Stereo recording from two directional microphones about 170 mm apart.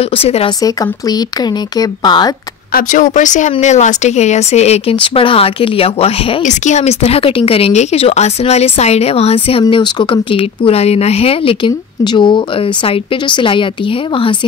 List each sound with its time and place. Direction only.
0.1 s a woman's voice: 35° left (ahead or behind)
0.6 s speech: 20° left (ahead or behind)
2.7 s a woman's voice: 50° left (ahead or behind); by 13.7 s 30° left (ahead or behind)